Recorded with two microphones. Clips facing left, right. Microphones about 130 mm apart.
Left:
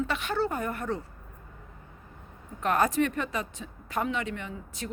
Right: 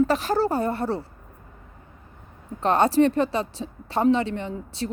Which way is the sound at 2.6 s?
30° right (ahead or behind).